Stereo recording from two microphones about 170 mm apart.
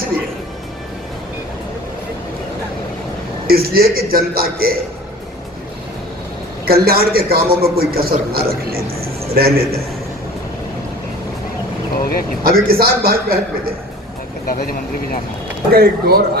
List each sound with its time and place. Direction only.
3.4 s a man's voice: 65° right (ahead or behind)
6.7 s a man's voice: 65° right (ahead or behind)
12.4 s a man's voice: 60° right (ahead or behind)
14.4 s speech: 60° left (ahead or behind)
15.7 s speech: 65° right (ahead or behind)